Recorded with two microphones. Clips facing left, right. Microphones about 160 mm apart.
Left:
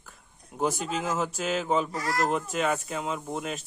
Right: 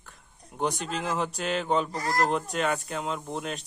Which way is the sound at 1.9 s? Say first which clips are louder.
Right 1 dB; 35° right (ahead or behind).